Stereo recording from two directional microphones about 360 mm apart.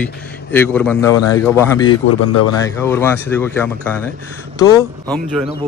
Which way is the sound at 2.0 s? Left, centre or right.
Left.